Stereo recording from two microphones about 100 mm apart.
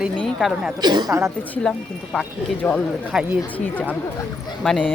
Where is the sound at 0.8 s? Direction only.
45° right (ahead or behind).